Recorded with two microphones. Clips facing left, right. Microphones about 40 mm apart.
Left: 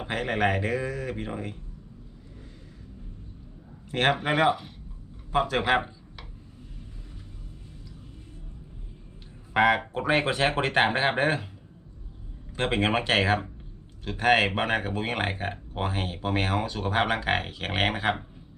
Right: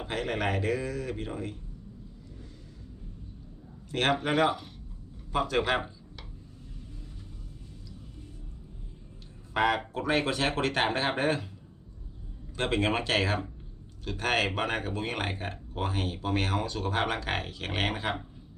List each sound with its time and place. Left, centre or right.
0.0 s speech: left
4.2 s speech: centre
9.5 s speech: left
12.5 s speech: left